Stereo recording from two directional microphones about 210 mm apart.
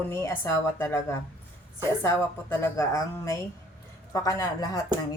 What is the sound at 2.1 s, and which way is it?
Speech, 10° left (ahead or behind).